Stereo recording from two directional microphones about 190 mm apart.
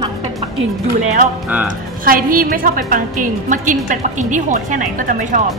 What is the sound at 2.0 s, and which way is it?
A woman's voice, 45° right (ahead or behind).